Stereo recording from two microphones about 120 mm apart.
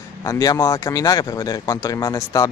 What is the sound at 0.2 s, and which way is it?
Speech, 30° left (ahead or behind).